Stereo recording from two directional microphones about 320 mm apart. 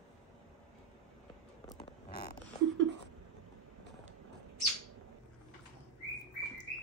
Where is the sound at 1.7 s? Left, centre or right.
Centre.